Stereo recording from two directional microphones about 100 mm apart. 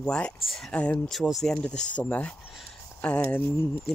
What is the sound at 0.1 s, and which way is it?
Speech, 5° left (ahead or behind).